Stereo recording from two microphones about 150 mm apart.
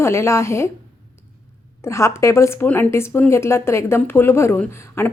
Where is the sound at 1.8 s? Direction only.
20° left (ahead or behind).